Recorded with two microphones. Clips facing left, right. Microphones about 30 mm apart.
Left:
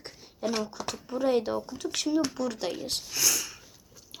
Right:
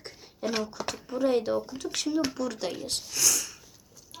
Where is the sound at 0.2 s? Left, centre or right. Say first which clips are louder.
Even; centre.